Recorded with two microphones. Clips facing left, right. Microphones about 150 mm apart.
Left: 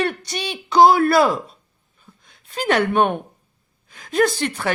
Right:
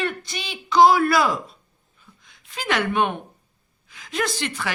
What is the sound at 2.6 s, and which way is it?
Speech, 50° left (ahead or behind).